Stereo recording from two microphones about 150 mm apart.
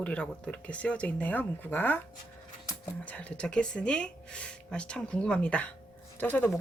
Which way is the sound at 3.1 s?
10° left (ahead or behind).